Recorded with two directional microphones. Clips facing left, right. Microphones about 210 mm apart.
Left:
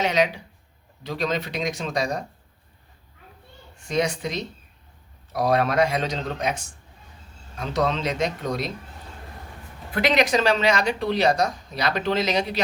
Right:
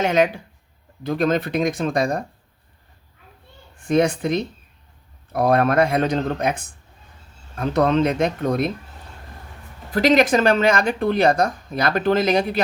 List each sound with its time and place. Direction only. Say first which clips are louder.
0.0 s speech: right 4 dB; 50° right (ahead or behind)
3.8 s speech: right 6 dB; 55° right (ahead or behind)
9.9 s speech: right 5 dB; 45° right (ahead or behind)